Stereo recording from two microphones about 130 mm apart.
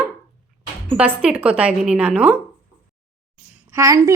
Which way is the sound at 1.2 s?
10° right (ahead or behind).